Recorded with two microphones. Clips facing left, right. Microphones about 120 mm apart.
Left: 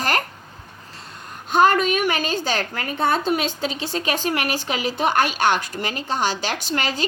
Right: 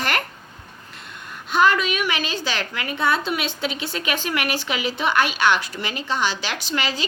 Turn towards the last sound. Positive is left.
turn(degrees=45)  # may be behind; listen again after turning